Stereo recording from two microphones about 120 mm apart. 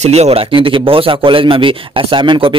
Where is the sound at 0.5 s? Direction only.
45° right (ahead or behind).